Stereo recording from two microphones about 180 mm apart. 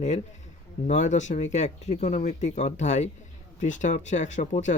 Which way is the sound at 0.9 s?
40° left (ahead or behind).